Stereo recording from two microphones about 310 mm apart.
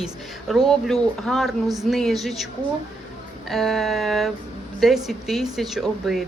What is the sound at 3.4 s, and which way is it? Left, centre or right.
A woman's voice, centre.